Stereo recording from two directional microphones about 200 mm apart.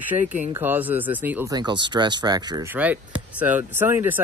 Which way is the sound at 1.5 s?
20° right (ahead or behind).